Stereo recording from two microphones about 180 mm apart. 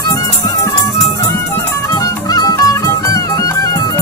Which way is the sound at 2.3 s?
20° left (ahead or behind).